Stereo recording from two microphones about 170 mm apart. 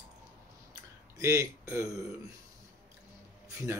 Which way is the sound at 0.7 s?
15° right (ahead or behind).